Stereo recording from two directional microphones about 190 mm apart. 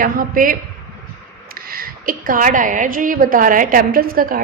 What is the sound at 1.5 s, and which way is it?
A woman's voice, 50° right (ahead or behind).